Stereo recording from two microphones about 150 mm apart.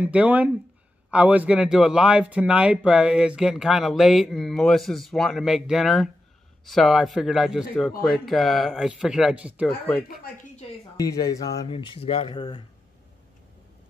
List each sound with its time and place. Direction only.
0.0 s speech: 10° right (ahead or behind)
11.0 s speech: 25° left (ahead or behind)
11.6 s speech: 35° left (ahead or behind)